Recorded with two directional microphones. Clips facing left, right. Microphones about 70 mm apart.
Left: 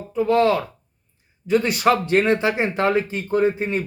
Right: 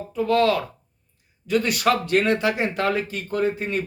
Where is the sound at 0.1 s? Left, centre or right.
Left.